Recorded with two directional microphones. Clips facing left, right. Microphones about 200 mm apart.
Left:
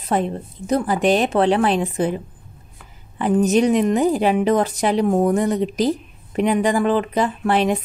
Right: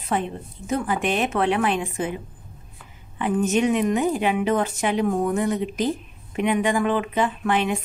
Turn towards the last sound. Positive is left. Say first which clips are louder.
# left 4 dB
turn(degrees=35)  # may be behind; listen again after turning